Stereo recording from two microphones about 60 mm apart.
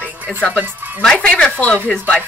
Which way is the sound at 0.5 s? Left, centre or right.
Right.